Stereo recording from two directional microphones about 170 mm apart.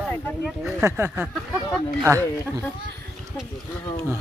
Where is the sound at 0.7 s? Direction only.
15° right (ahead or behind).